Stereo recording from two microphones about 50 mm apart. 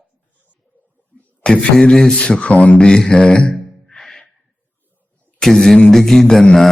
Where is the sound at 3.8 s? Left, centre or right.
Centre.